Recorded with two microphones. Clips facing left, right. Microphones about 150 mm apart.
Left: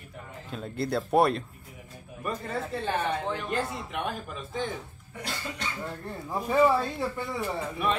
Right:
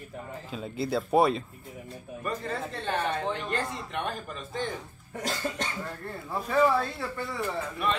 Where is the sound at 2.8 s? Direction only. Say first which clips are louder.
Right 1 dB; 10° left (ahead or behind).